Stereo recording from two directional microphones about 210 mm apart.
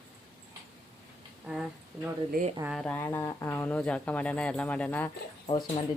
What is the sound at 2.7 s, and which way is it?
Speech, 5° left (ahead or behind).